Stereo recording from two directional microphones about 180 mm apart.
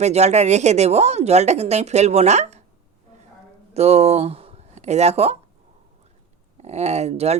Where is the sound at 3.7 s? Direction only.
35° right (ahead or behind).